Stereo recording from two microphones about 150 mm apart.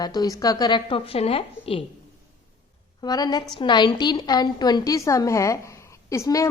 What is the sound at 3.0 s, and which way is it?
A woman's voice, 25° left (ahead or behind).